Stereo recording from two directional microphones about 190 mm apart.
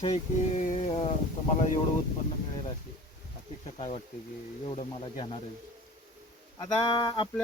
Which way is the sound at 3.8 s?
35° left (ahead or behind).